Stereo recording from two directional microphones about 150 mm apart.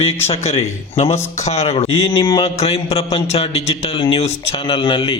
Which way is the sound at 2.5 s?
40° left (ahead or behind).